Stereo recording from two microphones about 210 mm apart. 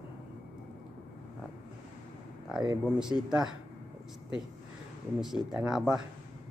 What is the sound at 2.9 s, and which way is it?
Speech, 5° right (ahead or behind).